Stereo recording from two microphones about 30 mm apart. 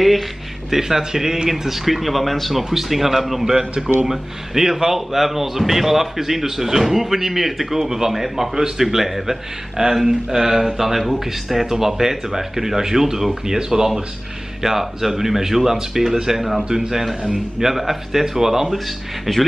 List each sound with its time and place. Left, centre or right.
0.7 s speech: centre
2.7 s speech: centre
3.5 s speech: right
4.1 s speech: centre
19.3 s speech: centre